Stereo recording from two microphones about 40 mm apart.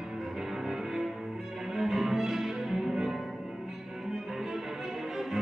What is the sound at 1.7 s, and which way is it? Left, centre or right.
Music, centre.